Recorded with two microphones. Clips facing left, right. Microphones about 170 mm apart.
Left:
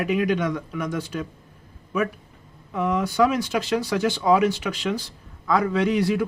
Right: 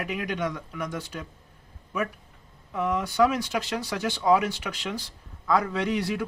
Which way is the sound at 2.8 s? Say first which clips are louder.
Left 2 dB; 90° left.